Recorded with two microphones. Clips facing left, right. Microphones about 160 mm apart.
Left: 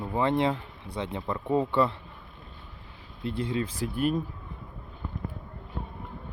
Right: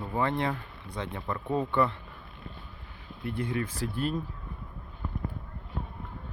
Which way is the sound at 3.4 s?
25° left (ahead or behind).